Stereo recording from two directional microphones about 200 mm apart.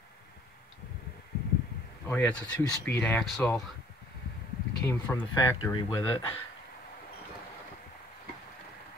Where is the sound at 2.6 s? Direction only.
10° left (ahead or behind).